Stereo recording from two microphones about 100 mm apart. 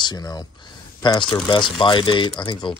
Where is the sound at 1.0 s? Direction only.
50° left (ahead or behind).